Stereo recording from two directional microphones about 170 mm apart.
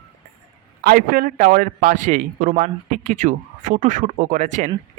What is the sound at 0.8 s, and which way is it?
Speech, 55° right (ahead or behind).